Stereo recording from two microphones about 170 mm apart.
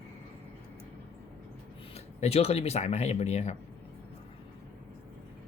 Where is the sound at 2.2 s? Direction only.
35° left (ahead or behind).